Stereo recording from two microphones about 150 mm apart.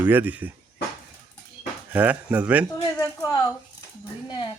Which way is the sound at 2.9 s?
25° left (ahead or behind).